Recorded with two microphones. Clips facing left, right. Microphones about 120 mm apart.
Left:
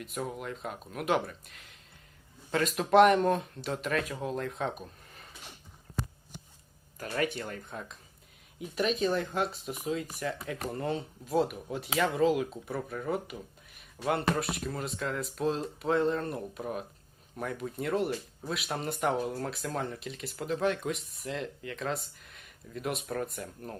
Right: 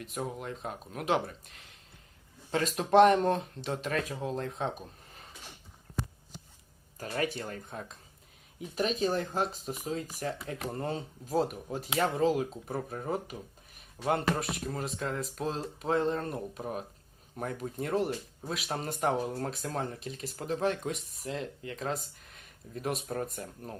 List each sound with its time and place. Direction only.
0.0 s speech: 40° right (ahead or behind)
5.0 s drawer open or close: 40° right (ahead or behind)
7.0 s speech: 30° right (ahead or behind)